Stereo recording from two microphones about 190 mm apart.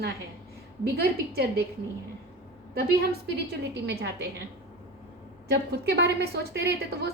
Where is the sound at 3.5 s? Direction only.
70° right (ahead or behind).